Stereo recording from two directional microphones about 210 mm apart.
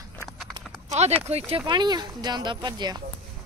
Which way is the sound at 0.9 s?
30° right (ahead or behind).